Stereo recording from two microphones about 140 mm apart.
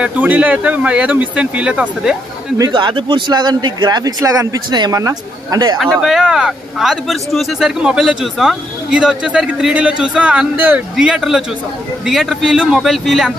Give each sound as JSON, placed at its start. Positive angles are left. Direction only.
{"t": 0.0, "sound": "speech", "side_deg": -10}
{"t": 2.6, "sound": "speech", "side_deg": -35}
{"t": 5.8, "sound": "speech", "side_deg": 0}